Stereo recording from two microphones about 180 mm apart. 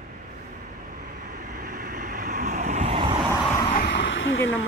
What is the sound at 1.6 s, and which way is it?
Vehicle, 50° right (ahead or behind).